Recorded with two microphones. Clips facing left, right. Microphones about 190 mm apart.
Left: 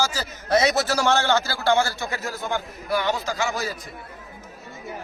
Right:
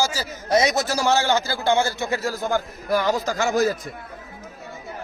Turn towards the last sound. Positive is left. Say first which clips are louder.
# right 6 dB
turn(degrees=-45)  # may be behind; listen again after turning